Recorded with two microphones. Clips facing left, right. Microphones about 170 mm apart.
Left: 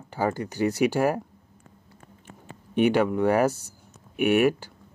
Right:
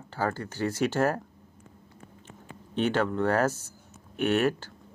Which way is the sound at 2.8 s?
15° left (ahead or behind).